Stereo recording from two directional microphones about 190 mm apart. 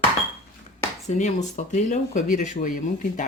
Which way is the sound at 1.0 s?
40° left (ahead or behind).